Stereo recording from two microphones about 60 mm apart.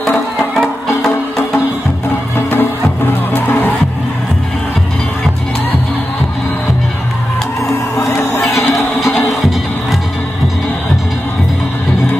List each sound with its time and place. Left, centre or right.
0.6 s music: centre
3.3 s music: left
8.1 s music: left
9.3 s music: centre